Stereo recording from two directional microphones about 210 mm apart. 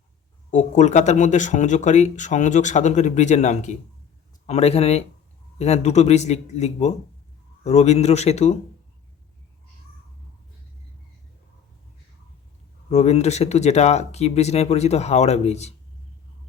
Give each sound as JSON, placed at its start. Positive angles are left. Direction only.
{"t": 0.5, "sound": "speech", "side_deg": 35}
{"t": 12.9, "sound": "speech", "side_deg": 30}